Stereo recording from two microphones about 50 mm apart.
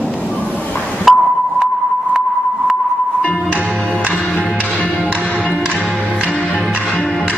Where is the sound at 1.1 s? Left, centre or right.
Centre.